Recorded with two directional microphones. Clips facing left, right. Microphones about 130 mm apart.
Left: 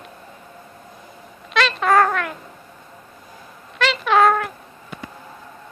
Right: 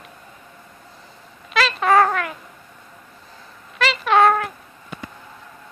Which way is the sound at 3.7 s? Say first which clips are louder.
Even; centre (ahead or behind).